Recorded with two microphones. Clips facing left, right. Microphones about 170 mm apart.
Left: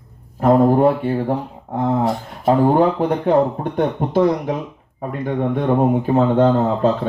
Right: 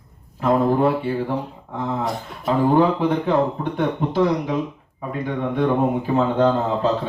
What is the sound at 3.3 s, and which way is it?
Speech, 45° left (ahead or behind).